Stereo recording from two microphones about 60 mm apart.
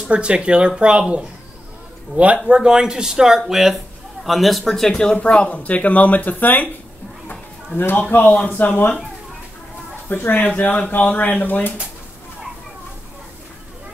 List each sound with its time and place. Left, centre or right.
0.1 s speech: centre
2.1 s speech: centre; by 6.7 s left
7.2 s a sound: left
8.5 s speech: left
10.0 s speech: left